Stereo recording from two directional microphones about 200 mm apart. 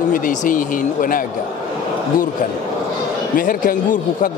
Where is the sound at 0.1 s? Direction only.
40° left (ahead or behind).